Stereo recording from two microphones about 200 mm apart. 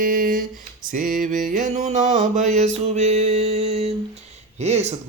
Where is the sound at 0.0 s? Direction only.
40° right (ahead or behind).